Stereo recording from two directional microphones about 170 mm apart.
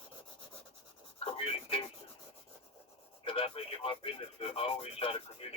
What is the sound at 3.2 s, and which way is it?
Speech, 35° left (ahead or behind).